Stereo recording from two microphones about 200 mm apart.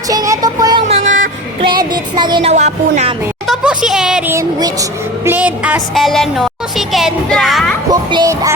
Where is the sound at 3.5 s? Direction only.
Centre (ahead or behind).